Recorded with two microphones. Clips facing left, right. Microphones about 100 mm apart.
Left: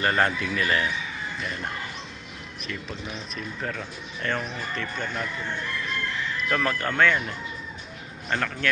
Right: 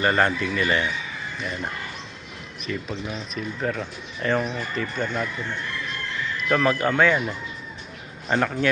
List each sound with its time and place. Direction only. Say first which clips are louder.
0.0 s speech: right 3 dB; 5° right (ahead or behind)
6.5 s speech: right 6 dB; 10° right (ahead or behind)